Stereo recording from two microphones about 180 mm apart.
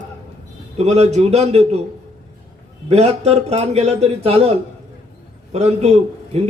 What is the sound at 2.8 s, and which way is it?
A man's voice, 35° right (ahead or behind).